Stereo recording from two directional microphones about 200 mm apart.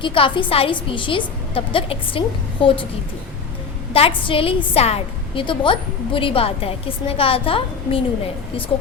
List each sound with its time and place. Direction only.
0.0 s a woman's voice: 25° left (ahead or behind)
3.9 s a woman's voice: 25° left (ahead or behind)